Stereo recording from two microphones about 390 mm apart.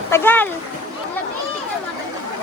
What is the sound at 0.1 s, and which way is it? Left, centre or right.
Speech, centre.